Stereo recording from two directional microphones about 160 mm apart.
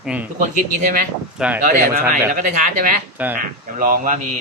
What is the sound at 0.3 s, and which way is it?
Speech, 55° right (ahead or behind).